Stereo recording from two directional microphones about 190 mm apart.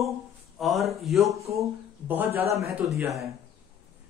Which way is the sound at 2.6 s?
15° right (ahead or behind).